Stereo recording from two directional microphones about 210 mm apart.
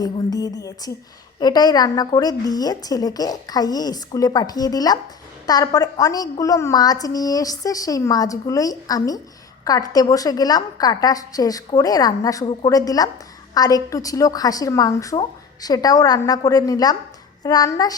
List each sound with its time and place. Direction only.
0.0 s a woman's voice: 15° left (ahead or behind)